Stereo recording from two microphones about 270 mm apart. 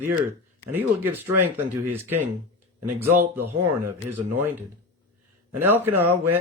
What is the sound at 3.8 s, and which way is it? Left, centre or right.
A man's voice, centre.